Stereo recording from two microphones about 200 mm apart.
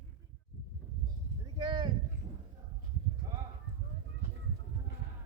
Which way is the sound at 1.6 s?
25° right (ahead or behind).